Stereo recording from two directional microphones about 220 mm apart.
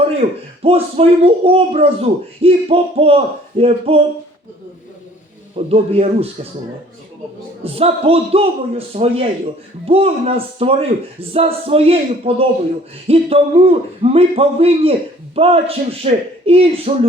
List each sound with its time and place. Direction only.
0.6 s a man's voice: 25° right (ahead or behind)
5.6 s a man's voice: 25° right (ahead or behind)
7.6 s a man's voice: 25° right (ahead or behind)